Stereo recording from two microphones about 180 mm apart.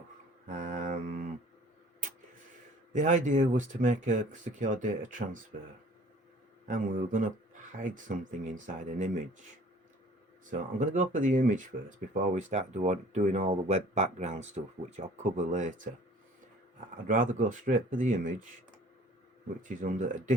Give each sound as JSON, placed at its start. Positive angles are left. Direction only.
{"t": 0.4, "sound": "mantra", "side_deg": -45}
{"t": 2.9, "sound": "speech", "side_deg": -45}
{"t": 6.7, "sound": "speech", "side_deg": -50}
{"t": 10.8, "sound": "speech", "side_deg": -45}
{"t": 17.1, "sound": "speech", "side_deg": -45}
{"t": 19.6, "sound": "speech", "side_deg": -45}